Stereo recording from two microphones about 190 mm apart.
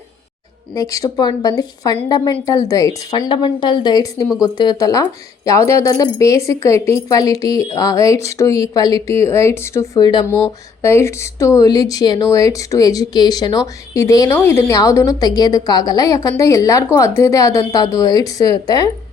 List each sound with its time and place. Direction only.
0.7 s a woman's voice: 15° left (ahead or behind)